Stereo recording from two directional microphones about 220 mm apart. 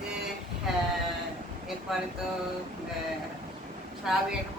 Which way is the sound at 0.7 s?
Centre (ahead or behind).